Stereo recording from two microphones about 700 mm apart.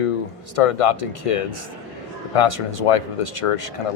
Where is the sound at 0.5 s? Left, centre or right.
Left.